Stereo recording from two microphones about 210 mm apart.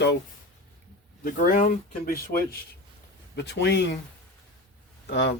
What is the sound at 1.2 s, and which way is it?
Speech, 40° left (ahead or behind).